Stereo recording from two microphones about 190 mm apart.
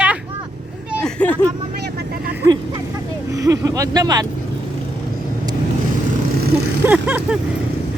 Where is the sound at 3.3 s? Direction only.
15° right (ahead or behind).